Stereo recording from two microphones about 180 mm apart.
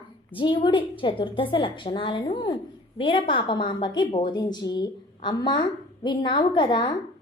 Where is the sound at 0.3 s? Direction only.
25° left (ahead or behind).